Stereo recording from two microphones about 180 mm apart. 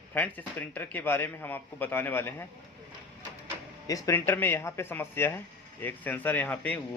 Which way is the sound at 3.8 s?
20° left (ahead or behind).